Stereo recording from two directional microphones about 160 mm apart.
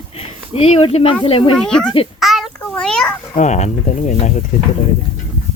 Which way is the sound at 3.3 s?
45° left (ahead or behind).